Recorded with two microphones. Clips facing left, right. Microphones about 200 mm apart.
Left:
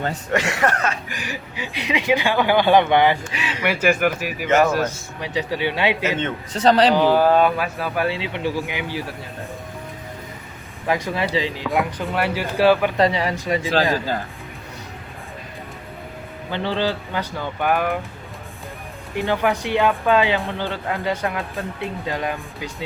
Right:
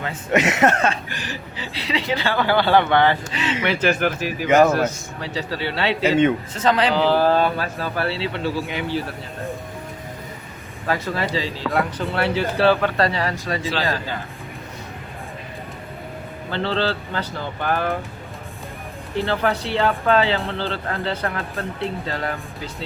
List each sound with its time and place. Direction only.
0.3 s speech: 20° right (ahead or behind)
1.1 s speech: 15° left (ahead or behind)
6.0 s a man's voice: 10° right (ahead or behind)
6.5 s speech: 35° left (ahead or behind)
6.9 s speech: 15° left (ahead or behind)
10.8 s speech: 15° left (ahead or behind)
16.5 s speech: 15° left (ahead or behind)
19.1 s speech: 15° left (ahead or behind)